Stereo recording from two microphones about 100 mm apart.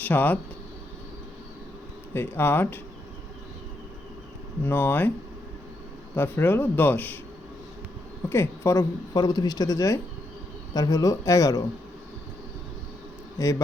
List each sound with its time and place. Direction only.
0.0 s speech: 20° left (ahead or behind)
2.1 s speech: 20° left (ahead or behind)
4.6 s speech: 20° left (ahead or behind)
6.1 s speech: 20° left (ahead or behind)
8.3 s speech: 25° left (ahead or behind)
9.1 s speech: 45° left (ahead or behind)